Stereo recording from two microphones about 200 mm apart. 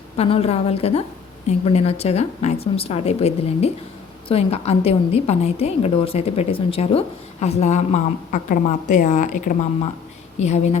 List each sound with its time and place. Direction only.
0.2 s a woman's voice: 30° left (ahead or behind)